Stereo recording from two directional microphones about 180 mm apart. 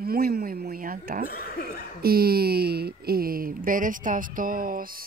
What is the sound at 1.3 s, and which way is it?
Cough, 55° left (ahead or behind).